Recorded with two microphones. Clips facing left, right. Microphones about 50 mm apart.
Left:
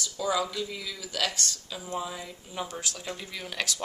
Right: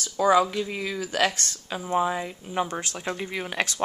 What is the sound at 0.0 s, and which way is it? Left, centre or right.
Speech, right.